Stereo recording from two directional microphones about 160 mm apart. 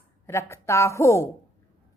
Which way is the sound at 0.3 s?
15° left (ahead or behind).